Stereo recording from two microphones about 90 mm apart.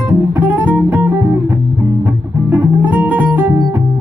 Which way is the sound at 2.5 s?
20° right (ahead or behind).